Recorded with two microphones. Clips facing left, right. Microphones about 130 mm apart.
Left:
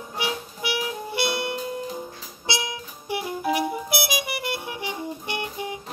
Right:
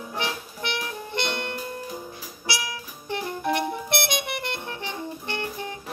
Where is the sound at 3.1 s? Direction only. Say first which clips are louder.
Left 1 dB; 5° left (ahead or behind).